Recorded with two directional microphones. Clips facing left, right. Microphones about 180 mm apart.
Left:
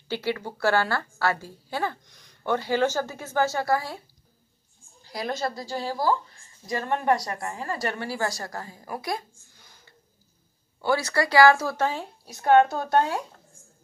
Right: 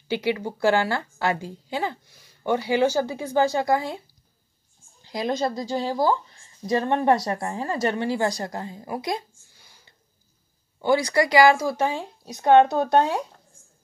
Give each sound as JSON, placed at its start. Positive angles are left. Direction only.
{"t": 0.1, "sound": "a woman's voice", "side_deg": -15}
{"t": 5.0, "sound": "a woman's voice", "side_deg": -20}